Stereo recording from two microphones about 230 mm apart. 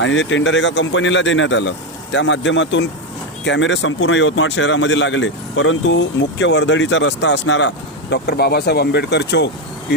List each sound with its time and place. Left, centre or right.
0.0 s speech: left